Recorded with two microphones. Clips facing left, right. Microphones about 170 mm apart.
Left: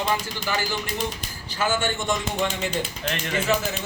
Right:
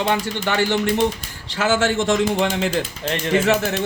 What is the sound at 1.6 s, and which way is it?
Speech, 85° right.